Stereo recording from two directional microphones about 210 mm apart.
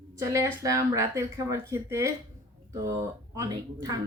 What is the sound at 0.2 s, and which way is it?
Speech, 15° right (ahead or behind).